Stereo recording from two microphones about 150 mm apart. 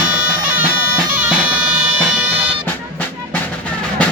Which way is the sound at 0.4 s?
10° right (ahead or behind).